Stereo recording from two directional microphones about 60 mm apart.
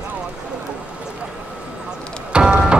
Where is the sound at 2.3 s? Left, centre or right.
Centre.